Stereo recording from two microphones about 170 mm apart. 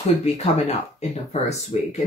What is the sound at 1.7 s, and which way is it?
Speech, 40° left (ahead or behind).